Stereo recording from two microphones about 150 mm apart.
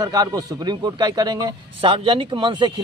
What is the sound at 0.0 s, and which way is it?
A man's voice, 25° right (ahead or behind).